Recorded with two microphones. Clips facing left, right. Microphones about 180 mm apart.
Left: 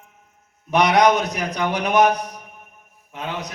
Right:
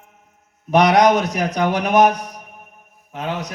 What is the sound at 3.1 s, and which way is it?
Speech, 45° right (ahead or behind).